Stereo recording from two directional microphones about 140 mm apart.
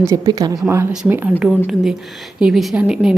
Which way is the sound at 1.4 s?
5° right (ahead or behind).